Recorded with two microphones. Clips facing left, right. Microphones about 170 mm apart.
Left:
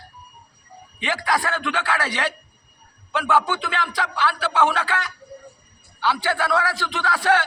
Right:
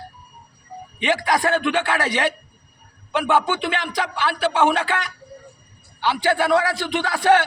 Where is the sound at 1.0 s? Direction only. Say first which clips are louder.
Right 4 dB; 20° right (ahead or behind).